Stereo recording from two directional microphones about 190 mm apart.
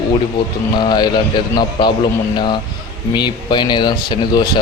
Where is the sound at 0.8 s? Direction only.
25° left (ahead or behind).